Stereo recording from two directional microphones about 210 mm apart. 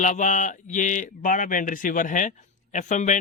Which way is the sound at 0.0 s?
35° left (ahead or behind).